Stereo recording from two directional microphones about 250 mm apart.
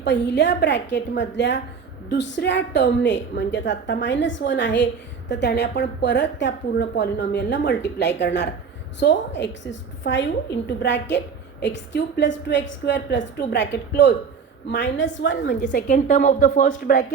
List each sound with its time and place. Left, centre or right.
0.0 s a woman's voice: left
15.6 s a woman's voice: left